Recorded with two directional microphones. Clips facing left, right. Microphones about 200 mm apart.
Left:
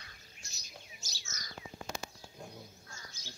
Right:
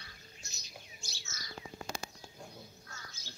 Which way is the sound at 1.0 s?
40° left (ahead or behind).